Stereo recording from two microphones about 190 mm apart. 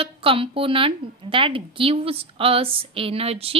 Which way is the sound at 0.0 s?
30° right (ahead or behind).